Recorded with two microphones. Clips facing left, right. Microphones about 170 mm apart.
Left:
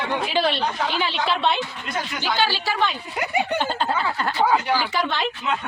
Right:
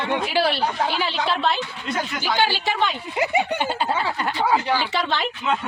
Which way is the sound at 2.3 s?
15° right (ahead or behind).